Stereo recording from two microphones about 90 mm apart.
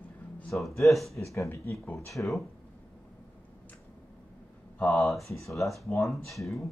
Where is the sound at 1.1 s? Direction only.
35° left (ahead or behind).